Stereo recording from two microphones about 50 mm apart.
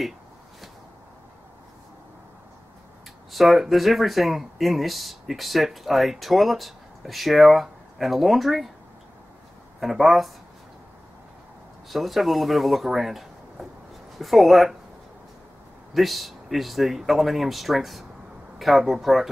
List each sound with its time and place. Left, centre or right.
3.3 s speech: centre
9.8 s speech: centre
11.9 s speech: centre
15.9 s speech: centre